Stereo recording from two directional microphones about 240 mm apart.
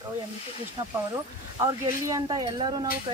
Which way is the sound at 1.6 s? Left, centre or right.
Centre.